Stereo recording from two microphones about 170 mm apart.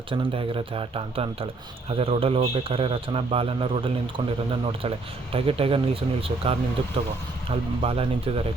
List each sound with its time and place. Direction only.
0.1 s a man's voice: 30° right (ahead or behind)